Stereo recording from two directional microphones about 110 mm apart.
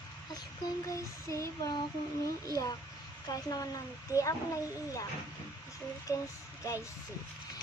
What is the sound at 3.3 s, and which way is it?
A woman's voice, 35° left (ahead or behind).